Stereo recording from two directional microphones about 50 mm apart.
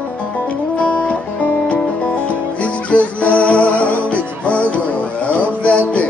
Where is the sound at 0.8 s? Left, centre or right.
Left.